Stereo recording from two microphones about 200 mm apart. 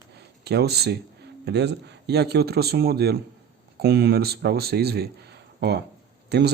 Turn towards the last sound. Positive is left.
turn(degrees=-55)  # may be behind; listen again after turning